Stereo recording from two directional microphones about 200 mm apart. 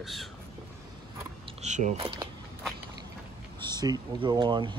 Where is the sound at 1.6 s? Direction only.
35° right (ahead or behind).